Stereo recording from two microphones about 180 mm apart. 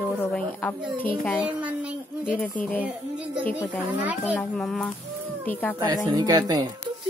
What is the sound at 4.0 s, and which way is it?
Child singing, 10° right (ahead or behind).